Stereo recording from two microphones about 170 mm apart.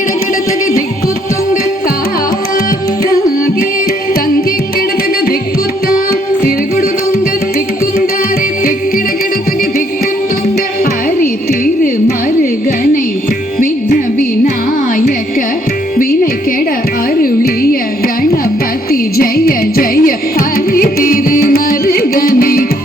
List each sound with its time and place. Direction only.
11.2 s music: 55° left (ahead or behind)
13.6 s music: 55° left (ahead or behind)
17.2 s carnatic music: 60° left (ahead or behind)
18.9 s music: 60° left (ahead or behind)